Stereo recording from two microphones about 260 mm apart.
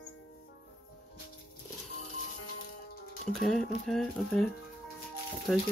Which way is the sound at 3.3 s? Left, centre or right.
Centre.